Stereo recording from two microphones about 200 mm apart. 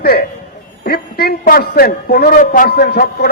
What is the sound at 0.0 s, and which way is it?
A man's voice, 50° left (ahead or behind).